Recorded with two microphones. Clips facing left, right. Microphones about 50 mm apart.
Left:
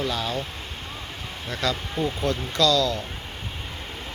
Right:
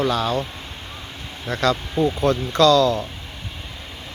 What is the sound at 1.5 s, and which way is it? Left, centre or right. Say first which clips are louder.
Speech: right 7 dB; right.